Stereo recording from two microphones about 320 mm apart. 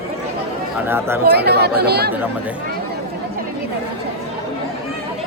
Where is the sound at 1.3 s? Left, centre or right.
Right.